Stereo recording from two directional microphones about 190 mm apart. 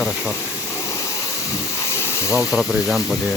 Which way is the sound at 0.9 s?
15° left (ahead or behind).